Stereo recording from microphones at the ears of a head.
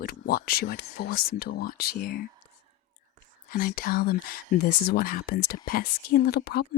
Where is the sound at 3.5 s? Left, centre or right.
Left.